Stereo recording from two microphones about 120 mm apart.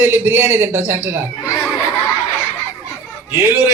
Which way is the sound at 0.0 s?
20° right (ahead or behind).